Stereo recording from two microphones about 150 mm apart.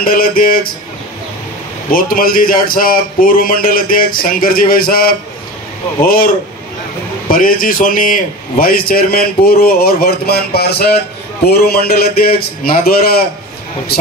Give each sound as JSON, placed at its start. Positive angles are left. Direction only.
{"t": 0.0, "sound": "a man's voice", "side_deg": 75}
{"t": 1.9, "sound": "a man's voice", "side_deg": 70}